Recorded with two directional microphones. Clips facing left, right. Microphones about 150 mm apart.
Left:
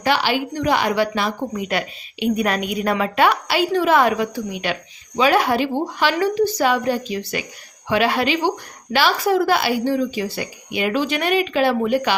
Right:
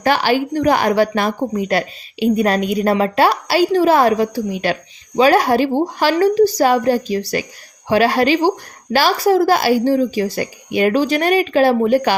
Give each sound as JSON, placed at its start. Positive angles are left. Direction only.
{"t": 0.0, "sound": "a woman's voice", "side_deg": -45}